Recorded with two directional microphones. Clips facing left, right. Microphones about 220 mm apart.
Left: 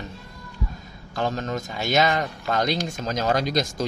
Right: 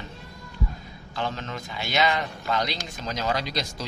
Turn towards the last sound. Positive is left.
turn(degrees=45)  # may be behind; listen again after turning